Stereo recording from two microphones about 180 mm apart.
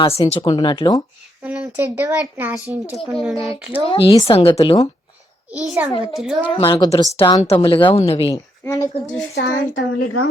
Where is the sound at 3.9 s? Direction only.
30° left (ahead or behind).